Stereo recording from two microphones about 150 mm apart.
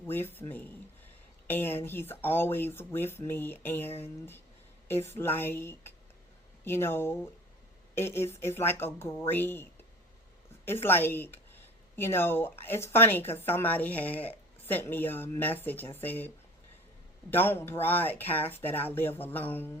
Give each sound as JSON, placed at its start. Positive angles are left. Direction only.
{"t": 0.1, "sound": "speech", "side_deg": 15}
{"t": 5.0, "sound": "speech", "side_deg": 15}
{"t": 10.8, "sound": "speech", "side_deg": 15}
{"t": 17.3, "sound": "speech", "side_deg": 15}